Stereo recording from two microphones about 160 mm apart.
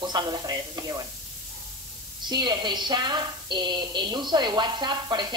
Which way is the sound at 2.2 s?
25° right (ahead or behind).